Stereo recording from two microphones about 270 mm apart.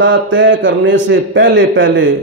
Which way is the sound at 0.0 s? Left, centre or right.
Right.